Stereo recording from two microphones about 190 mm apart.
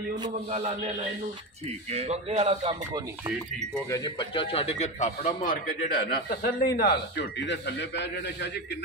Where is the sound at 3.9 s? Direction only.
25° left (ahead or behind).